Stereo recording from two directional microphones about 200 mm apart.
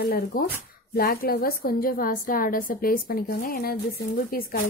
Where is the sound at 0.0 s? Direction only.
45° left (ahead or behind).